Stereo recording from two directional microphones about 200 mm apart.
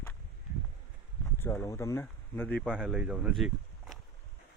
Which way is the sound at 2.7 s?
5° right (ahead or behind).